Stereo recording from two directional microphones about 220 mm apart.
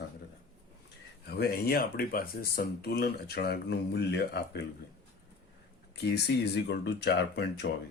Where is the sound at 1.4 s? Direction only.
45° left (ahead or behind).